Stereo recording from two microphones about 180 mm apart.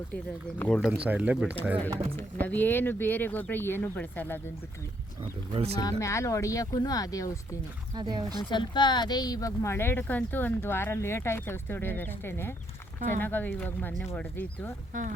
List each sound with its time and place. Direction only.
0.6 s speech: centre (ahead or behind)
2.1 s speech: 10° left (ahead or behind)
5.5 s speech: 30° right (ahead or behind)
5.8 s speech: 15° left (ahead or behind)
7.9 s speech: 25° right (ahead or behind)
8.4 s speech: 25° left (ahead or behind)